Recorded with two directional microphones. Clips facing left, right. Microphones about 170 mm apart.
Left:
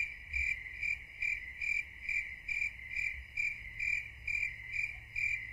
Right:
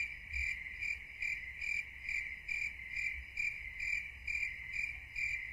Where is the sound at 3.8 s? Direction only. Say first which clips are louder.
Left 4 dB; 20° left (ahead or behind).